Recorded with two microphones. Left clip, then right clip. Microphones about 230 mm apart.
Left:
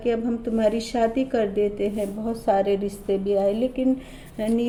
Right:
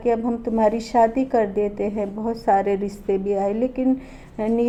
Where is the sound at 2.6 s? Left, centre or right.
Right.